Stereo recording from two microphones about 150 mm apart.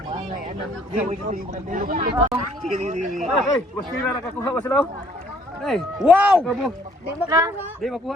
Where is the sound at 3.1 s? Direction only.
Centre (ahead or behind).